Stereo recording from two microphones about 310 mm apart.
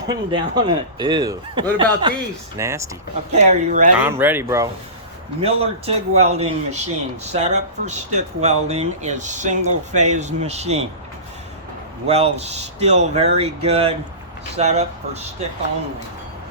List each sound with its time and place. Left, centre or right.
0.1 s a man's voice: centre
3.3 s speech: right
4.0 s a man's voice: centre
12.0 s speech: centre